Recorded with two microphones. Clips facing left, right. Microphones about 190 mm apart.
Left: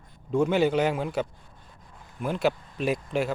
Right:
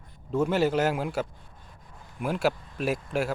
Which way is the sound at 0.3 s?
5° right (ahead or behind).